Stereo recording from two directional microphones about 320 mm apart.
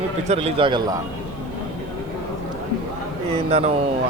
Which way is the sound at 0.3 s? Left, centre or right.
Centre.